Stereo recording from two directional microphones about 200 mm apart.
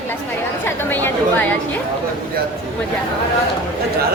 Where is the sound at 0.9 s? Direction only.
10° left (ahead or behind).